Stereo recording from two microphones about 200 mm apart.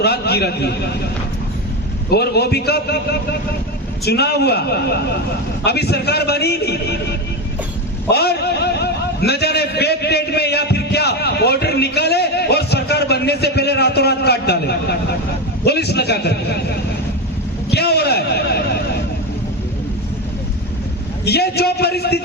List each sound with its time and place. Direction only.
0.0 s a man's voice: 55° left (ahead or behind)
2.0 s a man's voice: 55° left (ahead or behind)
8.1 s a man's voice: 55° left (ahead or behind)
17.7 s a man's voice: 55° left (ahead or behind)
21.2 s a man's voice: 55° left (ahead or behind)